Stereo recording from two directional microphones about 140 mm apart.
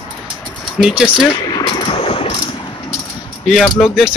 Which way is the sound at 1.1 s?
35° left (ahead or behind).